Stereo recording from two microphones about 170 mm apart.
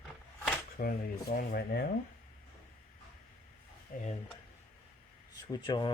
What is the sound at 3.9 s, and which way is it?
Speech, 55° left (ahead or behind).